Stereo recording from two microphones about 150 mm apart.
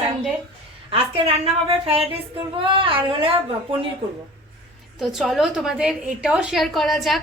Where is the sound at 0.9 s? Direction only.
40° right (ahead or behind).